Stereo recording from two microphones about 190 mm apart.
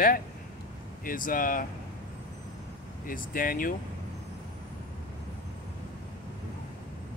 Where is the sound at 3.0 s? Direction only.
45° left (ahead or behind).